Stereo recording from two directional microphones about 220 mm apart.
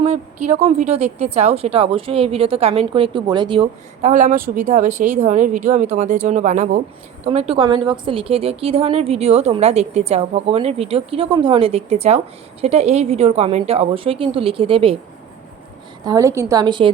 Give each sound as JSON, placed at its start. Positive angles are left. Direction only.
{"t": 0.0, "sound": "a woman's voice", "side_deg": -30}
{"t": 16.0, "sound": "a woman's voice", "side_deg": -15}